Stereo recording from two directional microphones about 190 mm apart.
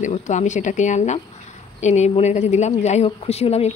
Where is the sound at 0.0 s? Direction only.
40° left (ahead or behind).